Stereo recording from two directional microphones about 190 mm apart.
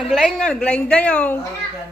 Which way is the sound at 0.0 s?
Centre (ahead or behind).